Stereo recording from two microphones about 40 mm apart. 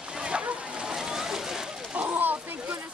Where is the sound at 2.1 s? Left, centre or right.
Right.